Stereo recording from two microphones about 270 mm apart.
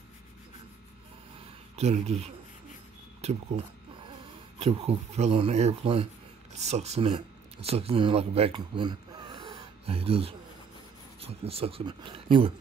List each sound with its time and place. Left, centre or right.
1.8 s speech: right
3.2 s a sound: right
4.6 s speech: right